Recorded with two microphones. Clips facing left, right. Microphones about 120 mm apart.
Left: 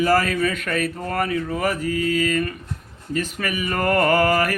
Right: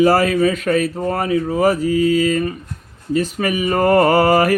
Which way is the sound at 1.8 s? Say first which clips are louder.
Right 6 dB; 50° left (ahead or behind).